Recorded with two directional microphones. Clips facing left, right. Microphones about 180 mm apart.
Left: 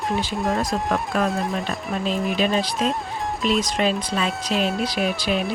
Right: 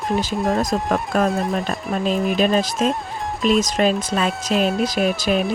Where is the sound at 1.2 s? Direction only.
Centre (ahead or behind).